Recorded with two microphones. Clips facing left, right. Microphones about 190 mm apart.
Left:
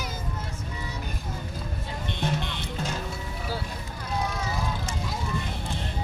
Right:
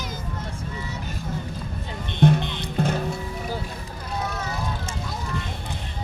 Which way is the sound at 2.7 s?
60° right (ahead or behind).